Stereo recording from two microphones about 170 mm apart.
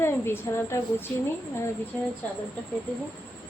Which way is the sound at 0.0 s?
15° left (ahead or behind).